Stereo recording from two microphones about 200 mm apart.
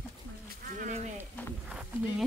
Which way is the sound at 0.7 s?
35° right (ahead or behind).